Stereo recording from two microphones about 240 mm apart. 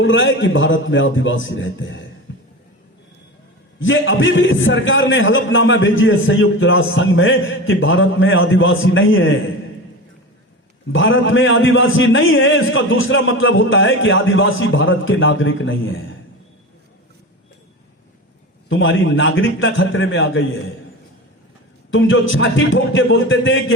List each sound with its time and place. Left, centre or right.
0.0 s a man's voice: left
3.8 s a man's voice: left
10.9 s a man's voice: left
18.7 s a man's voice: left
21.8 s a man's voice: left